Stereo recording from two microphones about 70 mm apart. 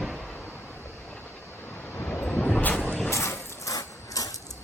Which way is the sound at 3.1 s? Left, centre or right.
Left.